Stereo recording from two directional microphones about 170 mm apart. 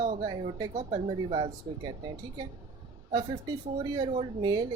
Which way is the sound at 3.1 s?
25° right (ahead or behind).